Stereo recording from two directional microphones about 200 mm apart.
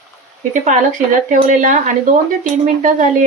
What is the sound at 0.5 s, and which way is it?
Speech, 40° right (ahead or behind).